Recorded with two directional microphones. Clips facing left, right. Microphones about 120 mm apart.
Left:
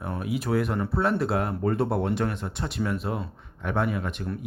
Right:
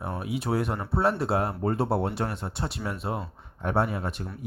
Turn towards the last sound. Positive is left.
turn(degrees=-35)  # may be behind; listen again after turning